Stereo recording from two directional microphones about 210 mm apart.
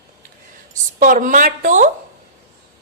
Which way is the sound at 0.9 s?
40° right (ahead or behind).